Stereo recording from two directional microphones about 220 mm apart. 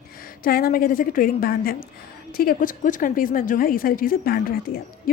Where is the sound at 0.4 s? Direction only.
40° left (ahead or behind).